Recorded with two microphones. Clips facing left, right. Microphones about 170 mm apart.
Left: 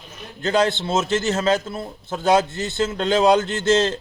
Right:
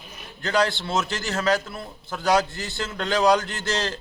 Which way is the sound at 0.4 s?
25° left (ahead or behind).